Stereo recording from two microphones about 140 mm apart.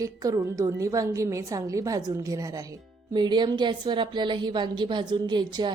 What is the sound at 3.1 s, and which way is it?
A woman's voice, 35° right (ahead or behind).